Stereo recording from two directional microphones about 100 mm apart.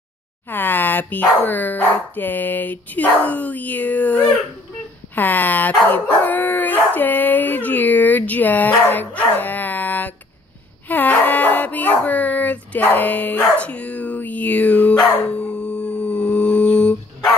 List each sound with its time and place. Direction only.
0.5 s speech: 20° left (ahead or behind)
10.9 s dog: 20° left (ahead or behind)